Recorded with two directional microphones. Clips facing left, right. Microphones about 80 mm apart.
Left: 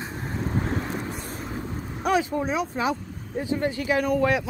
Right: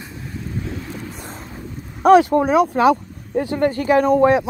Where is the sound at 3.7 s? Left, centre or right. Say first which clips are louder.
Right 8 dB; right.